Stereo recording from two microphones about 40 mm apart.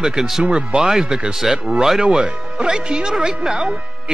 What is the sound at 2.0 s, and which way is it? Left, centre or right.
Speech, right.